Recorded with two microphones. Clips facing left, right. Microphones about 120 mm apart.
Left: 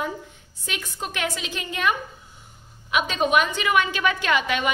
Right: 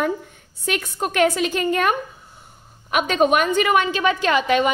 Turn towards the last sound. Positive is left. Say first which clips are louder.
# right 5 dB
turn(degrees=-35)  # may be behind; listen again after turning